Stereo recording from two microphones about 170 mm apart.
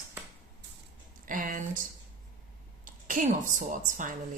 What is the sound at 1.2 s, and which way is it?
Speech, 50° right (ahead or behind).